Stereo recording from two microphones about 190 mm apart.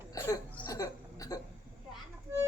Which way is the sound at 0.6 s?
20° left (ahead or behind).